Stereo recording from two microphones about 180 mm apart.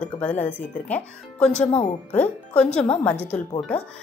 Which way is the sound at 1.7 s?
40° left (ahead or behind).